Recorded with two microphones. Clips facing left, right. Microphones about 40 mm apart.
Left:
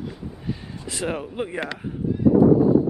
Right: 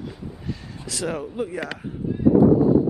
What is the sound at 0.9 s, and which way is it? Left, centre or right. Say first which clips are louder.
Speech: even; left.